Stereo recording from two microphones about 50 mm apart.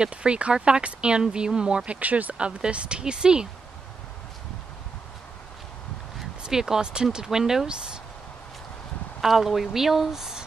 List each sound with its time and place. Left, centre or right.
0.0 s speech: right
1.9 s speech: right
6.4 s speech: centre
9.2 s speech: centre